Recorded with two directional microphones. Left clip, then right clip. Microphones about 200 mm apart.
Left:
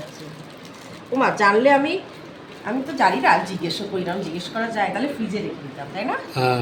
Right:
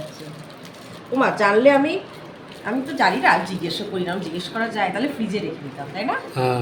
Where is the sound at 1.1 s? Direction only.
20° left (ahead or behind).